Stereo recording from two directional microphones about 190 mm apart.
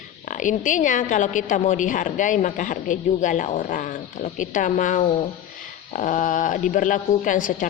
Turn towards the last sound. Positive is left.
turn(degrees=45)  # may be behind; listen again after turning